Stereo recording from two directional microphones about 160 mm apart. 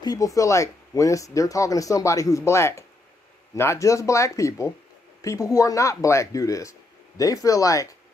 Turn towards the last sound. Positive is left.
turn(degrees=20)  # may be behind; listen again after turning